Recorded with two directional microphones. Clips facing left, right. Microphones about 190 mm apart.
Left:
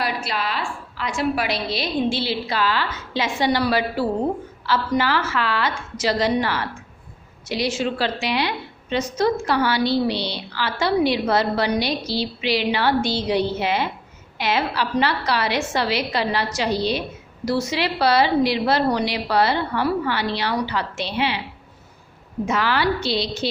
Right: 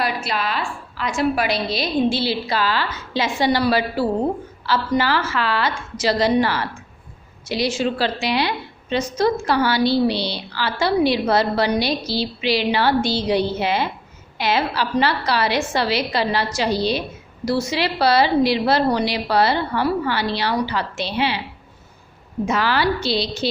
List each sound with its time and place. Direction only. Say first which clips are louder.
0.9 s a woman's voice: right 3 dB; 45° right (ahead or behind)
22.4 s a woman's voice: right 1 dB; 35° right (ahead or behind)